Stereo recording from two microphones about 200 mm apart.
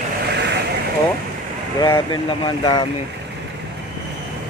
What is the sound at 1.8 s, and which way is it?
Speech, 15° left (ahead or behind).